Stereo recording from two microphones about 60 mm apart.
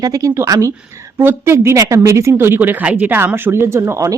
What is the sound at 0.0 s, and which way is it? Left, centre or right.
Speech, right.